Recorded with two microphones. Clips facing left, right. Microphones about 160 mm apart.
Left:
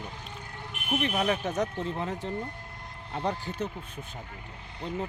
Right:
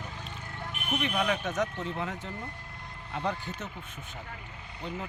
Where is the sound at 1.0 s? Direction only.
30° left (ahead or behind).